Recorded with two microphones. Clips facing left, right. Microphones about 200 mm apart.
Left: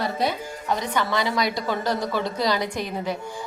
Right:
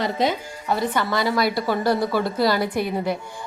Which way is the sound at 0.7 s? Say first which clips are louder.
Right 2 dB; 5° right (ahead or behind).